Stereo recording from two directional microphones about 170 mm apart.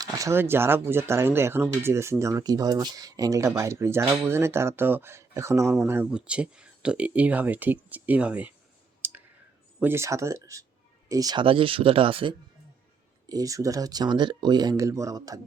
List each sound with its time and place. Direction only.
0.0 s speech: 20° right (ahead or behind)
9.0 s clicking: 10° right (ahead or behind)
9.8 s speech: 15° right (ahead or behind)